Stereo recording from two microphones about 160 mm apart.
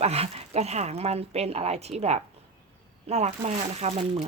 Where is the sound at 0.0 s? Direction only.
40° right (ahead or behind).